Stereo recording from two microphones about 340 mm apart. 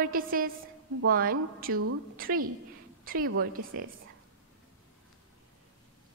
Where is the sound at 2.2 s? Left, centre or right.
Right.